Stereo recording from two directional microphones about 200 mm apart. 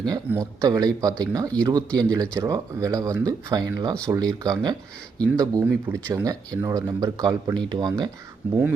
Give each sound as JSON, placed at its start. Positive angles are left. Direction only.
{"t": 0.3, "sound": "speech", "side_deg": -15}